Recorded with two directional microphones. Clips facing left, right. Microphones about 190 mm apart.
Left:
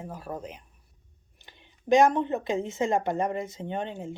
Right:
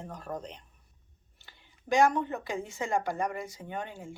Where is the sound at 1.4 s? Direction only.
20° left (ahead or behind).